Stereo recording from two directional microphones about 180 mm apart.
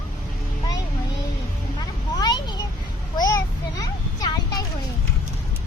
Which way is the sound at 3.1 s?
20° left (ahead or behind).